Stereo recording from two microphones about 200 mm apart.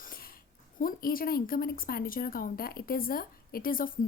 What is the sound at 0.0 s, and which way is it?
A woman's voice, 45° left (ahead or behind).